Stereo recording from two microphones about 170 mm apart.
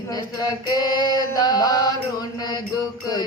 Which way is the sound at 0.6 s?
25° left (ahead or behind).